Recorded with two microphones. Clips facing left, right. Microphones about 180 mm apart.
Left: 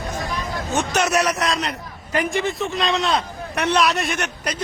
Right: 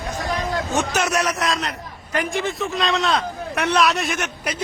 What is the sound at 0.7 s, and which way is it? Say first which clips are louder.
A man's voice: left 3 dB; centre (ahead or behind).